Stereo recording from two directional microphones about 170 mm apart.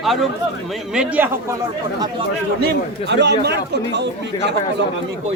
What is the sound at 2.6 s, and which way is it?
A man's voice, 90° right.